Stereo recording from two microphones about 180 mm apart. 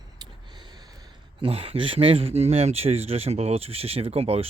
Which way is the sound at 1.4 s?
30° right (ahead or behind).